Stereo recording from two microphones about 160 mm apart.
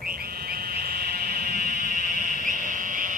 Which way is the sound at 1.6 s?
60° right (ahead or behind).